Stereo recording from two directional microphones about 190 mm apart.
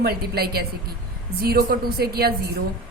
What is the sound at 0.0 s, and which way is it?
A woman's voice, 55° right (ahead or behind).